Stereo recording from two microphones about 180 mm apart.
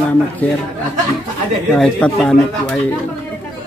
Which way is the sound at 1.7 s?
5° left (ahead or behind).